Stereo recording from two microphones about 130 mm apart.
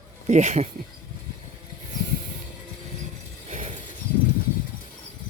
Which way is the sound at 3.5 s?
75° right (ahead or behind).